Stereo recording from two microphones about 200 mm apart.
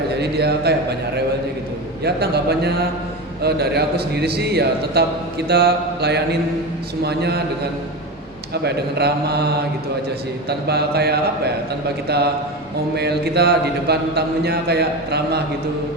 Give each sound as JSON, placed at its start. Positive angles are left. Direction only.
{"t": 0.2, "sound": "a man's voice", "side_deg": -55}
{"t": 8.6, "sound": "a man's voice", "side_deg": -55}
{"t": 10.7, "sound": "a man's voice", "side_deg": -55}